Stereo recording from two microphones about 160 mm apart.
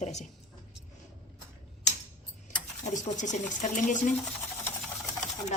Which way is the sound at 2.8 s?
50° left (ahead or behind).